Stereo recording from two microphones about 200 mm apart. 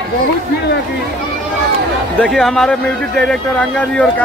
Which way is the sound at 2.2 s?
Centre (ahead or behind).